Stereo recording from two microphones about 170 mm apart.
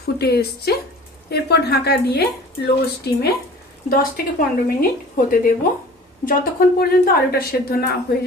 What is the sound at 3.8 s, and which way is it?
Speech, 60° left (ahead or behind).